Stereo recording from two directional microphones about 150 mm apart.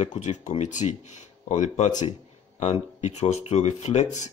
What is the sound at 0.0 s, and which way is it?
Speech, 50° left (ahead or behind).